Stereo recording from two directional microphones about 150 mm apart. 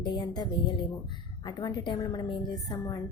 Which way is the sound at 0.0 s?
30° left (ahead or behind).